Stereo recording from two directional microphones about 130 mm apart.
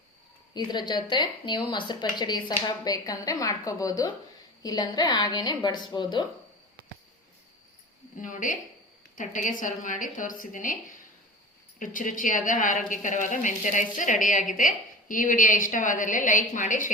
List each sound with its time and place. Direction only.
0.5 s a woman's voice: 35° left (ahead or behind)
8.1 s a woman's voice: 85° left